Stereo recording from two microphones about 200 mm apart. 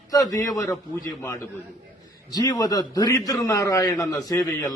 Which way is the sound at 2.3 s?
20° left (ahead or behind).